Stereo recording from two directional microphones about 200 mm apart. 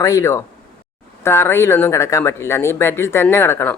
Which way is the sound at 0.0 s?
15° left (ahead or behind).